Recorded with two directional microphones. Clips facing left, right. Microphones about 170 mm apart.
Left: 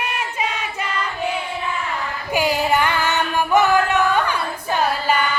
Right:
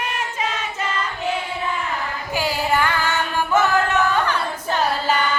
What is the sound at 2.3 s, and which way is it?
Female singing, 20° left (ahead or behind).